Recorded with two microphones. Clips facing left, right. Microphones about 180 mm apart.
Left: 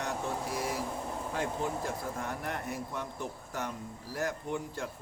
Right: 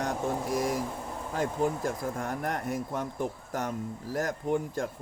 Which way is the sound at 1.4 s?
45° right (ahead or behind).